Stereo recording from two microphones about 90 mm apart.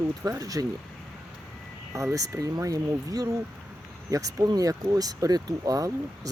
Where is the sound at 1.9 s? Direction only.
35° right (ahead or behind).